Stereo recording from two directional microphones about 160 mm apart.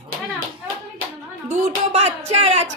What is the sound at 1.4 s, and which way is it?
Music, 40° right (ahead or behind).